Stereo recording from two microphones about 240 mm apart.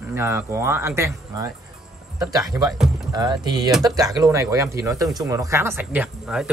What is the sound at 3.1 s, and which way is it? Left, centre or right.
Speech, centre.